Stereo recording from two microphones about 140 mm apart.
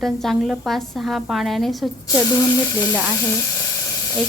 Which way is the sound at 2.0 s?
25° left (ahead or behind).